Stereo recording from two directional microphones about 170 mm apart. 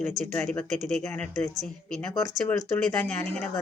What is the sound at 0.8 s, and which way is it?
Speech, 45° right (ahead or behind).